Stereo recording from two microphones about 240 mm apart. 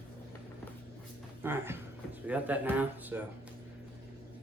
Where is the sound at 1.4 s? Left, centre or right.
Centre.